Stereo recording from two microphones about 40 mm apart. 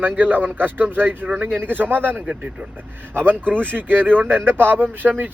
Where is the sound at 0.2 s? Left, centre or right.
Right.